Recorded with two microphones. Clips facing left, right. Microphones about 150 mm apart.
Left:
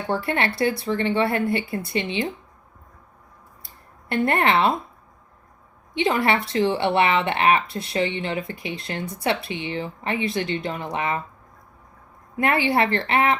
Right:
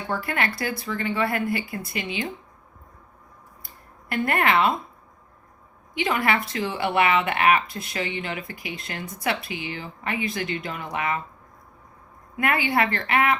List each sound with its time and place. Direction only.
0.1 s speech: 30° left (ahead or behind)
4.1 s speech: 30° left (ahead or behind)
5.9 s speech: 30° left (ahead or behind)
12.4 s speech: 30° left (ahead or behind)